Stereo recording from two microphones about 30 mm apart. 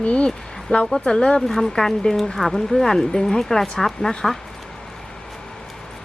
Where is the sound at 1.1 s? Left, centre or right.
Left.